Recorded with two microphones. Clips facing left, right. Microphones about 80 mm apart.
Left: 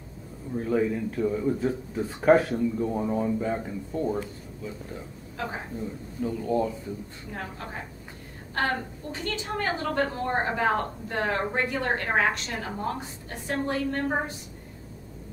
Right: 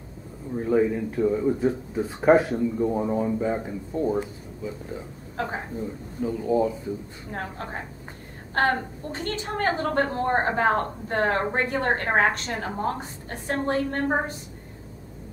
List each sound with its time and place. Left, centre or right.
0.6 s speech: centre
5.4 s a woman's voice: right
5.8 s speech: centre
7.2 s a woman's voice: right